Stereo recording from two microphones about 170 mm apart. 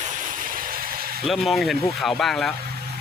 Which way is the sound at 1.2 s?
Centre (ahead or behind).